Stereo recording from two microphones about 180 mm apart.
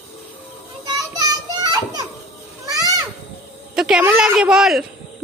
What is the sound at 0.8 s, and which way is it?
Children playing, 25° right (ahead or behind).